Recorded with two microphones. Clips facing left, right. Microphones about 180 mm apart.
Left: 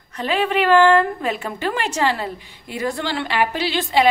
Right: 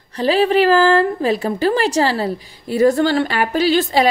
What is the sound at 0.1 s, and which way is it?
A woman's voice, 35° right (ahead or behind).